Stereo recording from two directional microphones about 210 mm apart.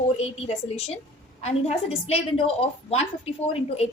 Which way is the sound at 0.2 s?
30° left (ahead or behind).